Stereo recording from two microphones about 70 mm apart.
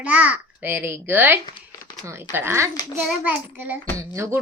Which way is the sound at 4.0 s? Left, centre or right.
Right.